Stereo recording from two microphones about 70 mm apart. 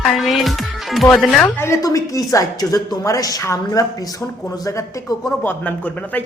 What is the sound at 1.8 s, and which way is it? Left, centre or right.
A woman's voice, left.